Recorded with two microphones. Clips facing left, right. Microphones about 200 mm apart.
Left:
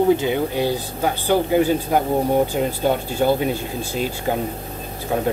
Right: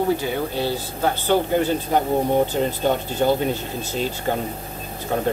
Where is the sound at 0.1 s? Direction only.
20° left (ahead or behind).